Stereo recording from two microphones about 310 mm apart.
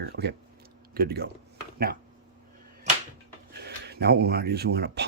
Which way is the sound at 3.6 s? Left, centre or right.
Right.